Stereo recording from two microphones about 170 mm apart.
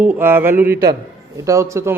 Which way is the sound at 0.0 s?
10° right (ahead or behind).